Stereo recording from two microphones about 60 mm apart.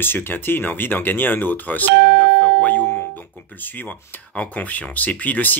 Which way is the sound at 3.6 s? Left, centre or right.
Left.